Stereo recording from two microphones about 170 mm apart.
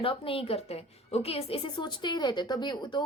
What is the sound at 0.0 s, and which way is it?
A woman's voice, 30° left (ahead or behind).